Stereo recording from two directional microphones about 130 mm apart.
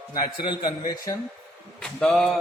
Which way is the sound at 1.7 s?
5° left (ahead or behind).